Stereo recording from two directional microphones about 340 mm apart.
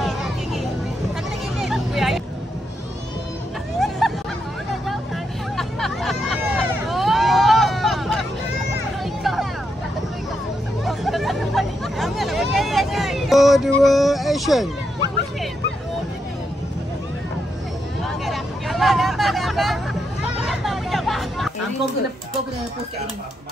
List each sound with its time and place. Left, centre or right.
0.0 s vehicle: centre
1.6 s vehicle: centre
4.0 s hubbub: centre
4.8 s vehicle: centre
9.0 s a sound: centre
10.8 s hubbub: centre
18.0 s vehicle: centre